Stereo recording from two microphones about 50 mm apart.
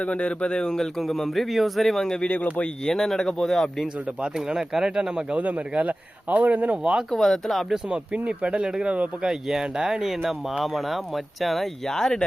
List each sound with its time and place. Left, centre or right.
0.0 s speech: left
2.2 s speech: left
2.8 s speech: centre
4.2 s speech: centre
5.4 s speech: right
7.1 s speech: centre
7.9 s speech: right; by 12.2 s centre